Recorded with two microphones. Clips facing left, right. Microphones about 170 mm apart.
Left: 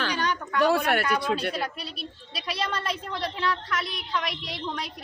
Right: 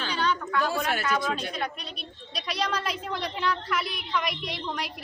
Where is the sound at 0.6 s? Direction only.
65° left (ahead or behind).